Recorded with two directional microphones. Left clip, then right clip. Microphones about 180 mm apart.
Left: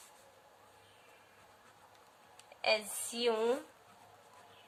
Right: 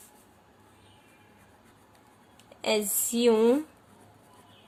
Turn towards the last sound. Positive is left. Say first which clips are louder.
# right 10 dB
turn(degrees=-35)  # may be behind; listen again after turning